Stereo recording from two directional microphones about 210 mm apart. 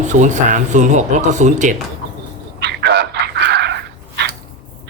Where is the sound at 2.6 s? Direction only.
50° right (ahead or behind).